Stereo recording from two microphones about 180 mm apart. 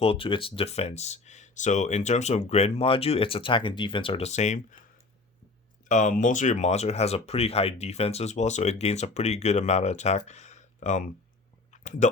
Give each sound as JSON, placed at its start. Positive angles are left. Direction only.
{"t": 0.0, "sound": "speech", "side_deg": 30}
{"t": 5.9, "sound": "speech", "side_deg": 45}
{"t": 11.7, "sound": "a sound", "side_deg": 40}